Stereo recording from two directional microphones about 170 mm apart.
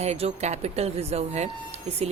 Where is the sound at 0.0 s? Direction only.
35° right (ahead or behind).